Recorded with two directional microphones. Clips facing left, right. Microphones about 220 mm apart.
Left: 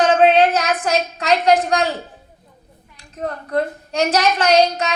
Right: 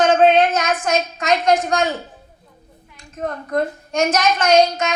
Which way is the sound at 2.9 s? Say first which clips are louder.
Even; 35° left (ahead or behind).